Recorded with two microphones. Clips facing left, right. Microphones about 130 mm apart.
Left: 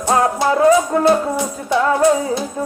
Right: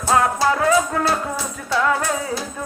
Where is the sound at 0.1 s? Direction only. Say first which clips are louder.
Left 2 dB; 25° left (ahead or behind).